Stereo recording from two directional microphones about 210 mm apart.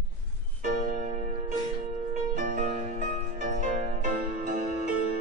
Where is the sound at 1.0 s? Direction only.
35° right (ahead or behind).